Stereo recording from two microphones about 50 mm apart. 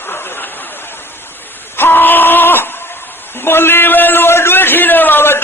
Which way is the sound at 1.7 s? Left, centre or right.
Left.